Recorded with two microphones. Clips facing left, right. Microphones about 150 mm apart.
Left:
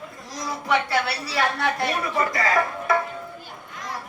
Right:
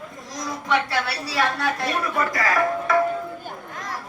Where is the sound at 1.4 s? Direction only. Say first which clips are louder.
Even; 25° left (ahead or behind).